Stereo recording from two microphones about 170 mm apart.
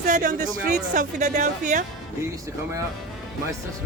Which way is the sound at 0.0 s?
50° right (ahead or behind).